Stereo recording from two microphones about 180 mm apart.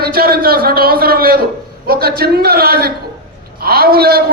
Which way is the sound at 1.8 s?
60° right (ahead or behind).